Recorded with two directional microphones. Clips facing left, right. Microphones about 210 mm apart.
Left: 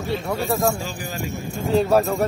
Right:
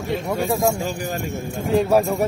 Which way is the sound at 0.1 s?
15° right (ahead or behind).